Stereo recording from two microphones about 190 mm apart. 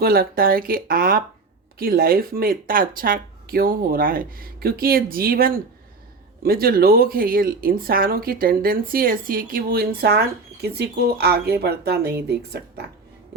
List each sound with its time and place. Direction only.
0.0 s speech: 50° right (ahead or behind)